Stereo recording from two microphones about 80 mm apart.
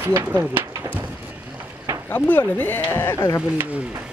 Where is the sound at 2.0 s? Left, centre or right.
Left.